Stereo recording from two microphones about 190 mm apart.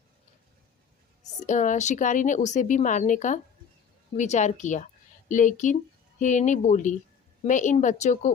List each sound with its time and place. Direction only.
1.5 s speech: 40° left (ahead or behind)